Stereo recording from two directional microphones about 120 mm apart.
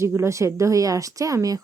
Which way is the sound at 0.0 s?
25° right (ahead or behind).